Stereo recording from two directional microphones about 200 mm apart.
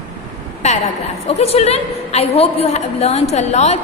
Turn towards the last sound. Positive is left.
turn(degrees=35)  # may be behind; listen again after turning